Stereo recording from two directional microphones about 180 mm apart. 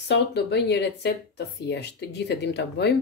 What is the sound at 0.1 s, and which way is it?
Speech, 65° left (ahead or behind).